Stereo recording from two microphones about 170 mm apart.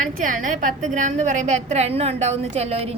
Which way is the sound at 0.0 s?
50° right (ahead or behind).